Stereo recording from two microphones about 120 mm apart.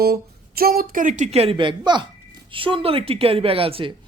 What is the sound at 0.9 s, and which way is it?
Speech, 90° right.